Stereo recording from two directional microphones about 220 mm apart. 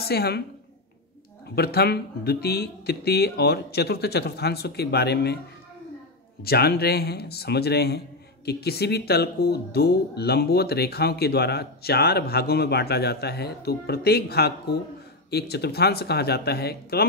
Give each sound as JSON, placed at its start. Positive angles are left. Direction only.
{"t": 0.0, "sound": "speech", "side_deg": 45}
{"t": 1.5, "sound": "speech", "side_deg": 45}
{"t": 6.4, "sound": "speech", "side_deg": 45}